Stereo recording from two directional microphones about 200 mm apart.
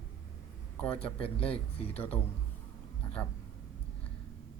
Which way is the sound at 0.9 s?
30° left (ahead or behind).